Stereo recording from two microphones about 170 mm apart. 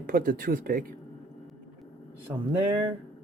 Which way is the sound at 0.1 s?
55° right (ahead or behind).